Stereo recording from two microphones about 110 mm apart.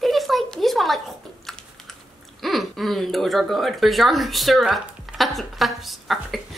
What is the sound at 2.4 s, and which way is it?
Speech, centre (ahead or behind).